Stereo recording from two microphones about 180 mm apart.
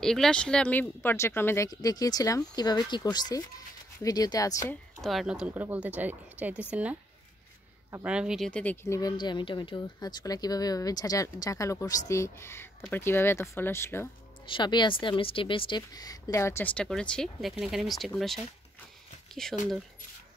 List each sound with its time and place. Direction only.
0.0 s speech: 5° left (ahead or behind); by 4.7 s 20° left (ahead or behind)
5.0 s a woman's voice: centre (ahead or behind); by 14.0 s 15° left (ahead or behind)
14.4 s a woman's voice: 25° left (ahead or behind); by 18.4 s centre (ahead or behind)
19.4 s speech: 5° left (ahead or behind)